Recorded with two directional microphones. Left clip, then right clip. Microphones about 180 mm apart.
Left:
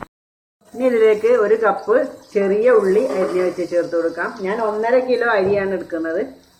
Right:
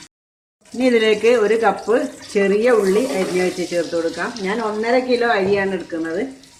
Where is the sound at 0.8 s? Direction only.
70° right (ahead or behind).